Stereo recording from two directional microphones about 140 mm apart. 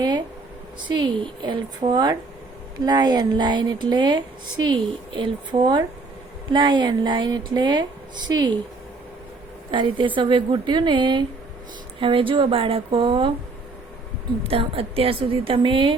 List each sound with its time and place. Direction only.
0.9 s a woman's voice: 35° right (ahead or behind)
9.7 s a woman's voice: 35° right (ahead or behind)
14.4 s a woman's voice: 40° right (ahead or behind)